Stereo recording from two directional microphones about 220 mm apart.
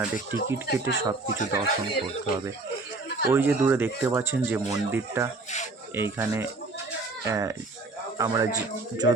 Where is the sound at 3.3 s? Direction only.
10° right (ahead or behind).